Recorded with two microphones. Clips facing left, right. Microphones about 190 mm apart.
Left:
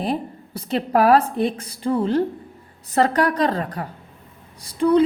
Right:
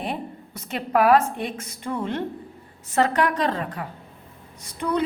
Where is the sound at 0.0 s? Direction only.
35° left (ahead or behind).